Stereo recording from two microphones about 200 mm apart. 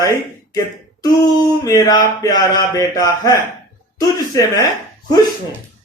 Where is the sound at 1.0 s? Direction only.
20° left (ahead or behind).